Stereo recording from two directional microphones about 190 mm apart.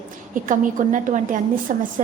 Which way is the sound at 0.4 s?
45° right (ahead or behind).